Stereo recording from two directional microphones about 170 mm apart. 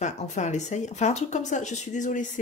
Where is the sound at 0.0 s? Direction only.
45° left (ahead or behind).